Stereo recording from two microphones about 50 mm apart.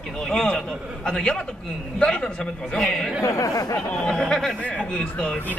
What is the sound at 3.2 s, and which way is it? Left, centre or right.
Speech, left.